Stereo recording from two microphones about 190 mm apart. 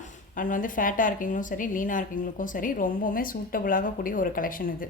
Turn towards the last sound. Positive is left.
turn(degrees=45)  # may be behind; listen again after turning